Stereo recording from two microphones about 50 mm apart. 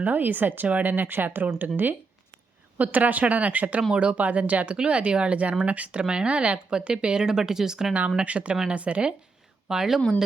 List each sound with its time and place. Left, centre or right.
0.0 s speech: right; by 7.9 s centre
8.2 s speech: right
9.6 s speech: centre